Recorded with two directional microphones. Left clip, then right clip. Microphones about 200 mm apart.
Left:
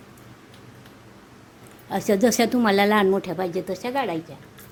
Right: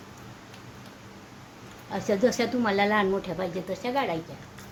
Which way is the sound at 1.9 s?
55° left (ahead or behind).